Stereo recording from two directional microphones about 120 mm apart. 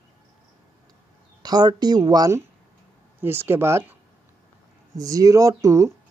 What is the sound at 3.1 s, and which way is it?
Speech, 20° right (ahead or behind).